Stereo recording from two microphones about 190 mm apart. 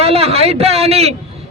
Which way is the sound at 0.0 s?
30° right (ahead or behind).